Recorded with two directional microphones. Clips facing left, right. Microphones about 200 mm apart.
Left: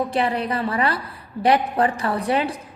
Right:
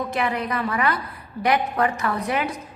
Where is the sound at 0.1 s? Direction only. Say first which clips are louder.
Left 2 dB; 30° left (ahead or behind).